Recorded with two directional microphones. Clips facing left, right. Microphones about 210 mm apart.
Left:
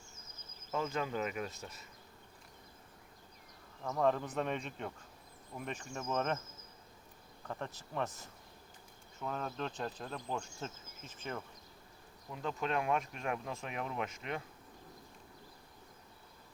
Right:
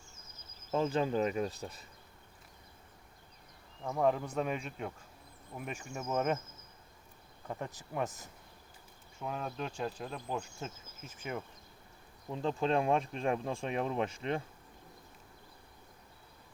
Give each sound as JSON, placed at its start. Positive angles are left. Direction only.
{"t": 0.7, "sound": "speech", "side_deg": -30}
{"t": 3.8, "sound": "insect", "side_deg": -10}
{"t": 7.4, "sound": "insect", "side_deg": -15}
{"t": 12.3, "sound": "speech", "side_deg": -30}